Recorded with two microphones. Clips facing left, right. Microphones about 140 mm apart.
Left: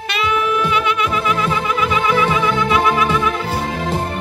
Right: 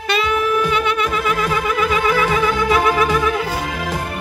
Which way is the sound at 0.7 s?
45° right (ahead or behind).